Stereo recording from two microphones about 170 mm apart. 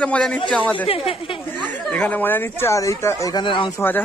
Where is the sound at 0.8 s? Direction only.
35° left (ahead or behind).